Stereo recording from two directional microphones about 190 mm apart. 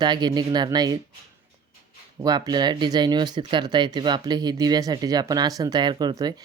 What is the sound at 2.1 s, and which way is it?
Speech, 20° right (ahead or behind).